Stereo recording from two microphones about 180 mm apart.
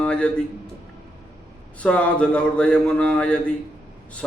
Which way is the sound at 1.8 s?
5° left (ahead or behind).